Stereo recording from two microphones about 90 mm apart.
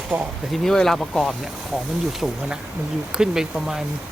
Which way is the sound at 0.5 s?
5° left (ahead or behind).